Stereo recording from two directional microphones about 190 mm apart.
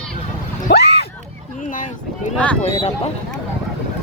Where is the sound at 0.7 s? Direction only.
60° left (ahead or behind).